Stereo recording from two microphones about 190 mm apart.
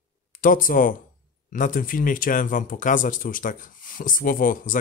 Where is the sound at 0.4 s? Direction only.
45° left (ahead or behind).